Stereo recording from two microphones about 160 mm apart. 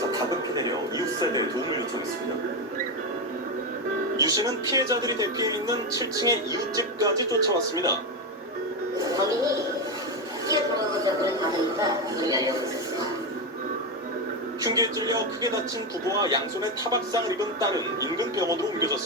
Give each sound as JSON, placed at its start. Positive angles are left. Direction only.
{"t": 0.1, "sound": "television", "side_deg": -25}
{"t": 4.2, "sound": "speech", "side_deg": -20}
{"t": 9.0, "sound": "music", "side_deg": -20}
{"t": 10.5, "sound": "a sound", "side_deg": -20}
{"t": 11.3, "sound": "speech", "side_deg": -25}
{"t": 14.6, "sound": "speech", "side_deg": -25}